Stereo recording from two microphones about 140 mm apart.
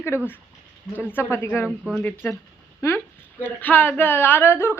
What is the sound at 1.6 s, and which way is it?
Speech, 5° right (ahead or behind).